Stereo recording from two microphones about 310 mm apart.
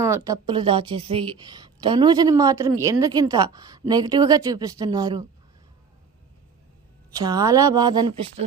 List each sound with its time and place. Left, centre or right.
0.3 s a woman's voice: centre
7.3 s a woman's voice: centre